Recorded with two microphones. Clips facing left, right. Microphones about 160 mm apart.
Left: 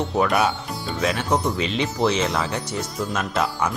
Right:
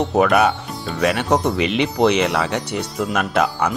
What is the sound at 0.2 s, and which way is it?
Speech, 65° right (ahead or behind).